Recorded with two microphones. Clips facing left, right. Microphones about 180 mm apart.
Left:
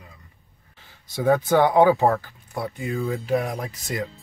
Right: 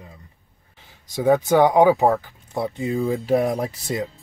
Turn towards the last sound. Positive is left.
turn(degrees=-35)  # may be behind; listen again after turning